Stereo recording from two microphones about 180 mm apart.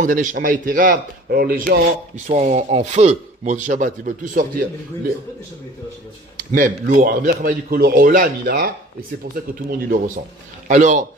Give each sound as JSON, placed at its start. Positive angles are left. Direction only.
{"t": 0.0, "sound": "speech", "side_deg": -45}
{"t": 2.2, "sound": "speech", "side_deg": -40}
{"t": 6.3, "sound": "speech", "side_deg": -50}